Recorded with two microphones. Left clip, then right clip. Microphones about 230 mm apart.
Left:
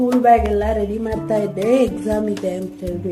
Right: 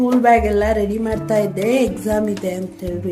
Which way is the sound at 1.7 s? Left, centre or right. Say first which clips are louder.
Left 2 dB; right.